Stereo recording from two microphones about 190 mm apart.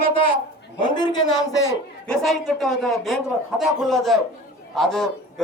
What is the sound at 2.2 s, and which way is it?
A man's voice, centre (ahead or behind).